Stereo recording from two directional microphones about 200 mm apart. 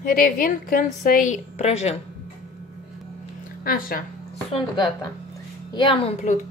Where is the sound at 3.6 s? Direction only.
45° left (ahead or behind).